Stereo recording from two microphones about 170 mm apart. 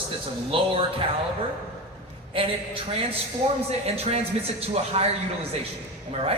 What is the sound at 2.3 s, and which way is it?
Speech, 30° right (ahead or behind).